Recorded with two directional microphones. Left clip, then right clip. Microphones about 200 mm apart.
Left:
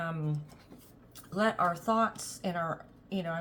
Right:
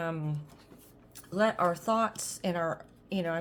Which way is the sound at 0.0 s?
40° right (ahead or behind).